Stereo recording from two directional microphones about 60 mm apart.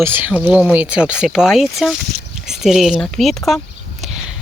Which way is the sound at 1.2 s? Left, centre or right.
Centre.